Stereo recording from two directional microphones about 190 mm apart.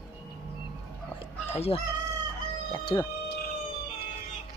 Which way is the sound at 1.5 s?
30° left (ahead or behind).